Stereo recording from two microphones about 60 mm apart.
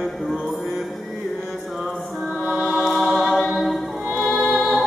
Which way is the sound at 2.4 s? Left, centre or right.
Right.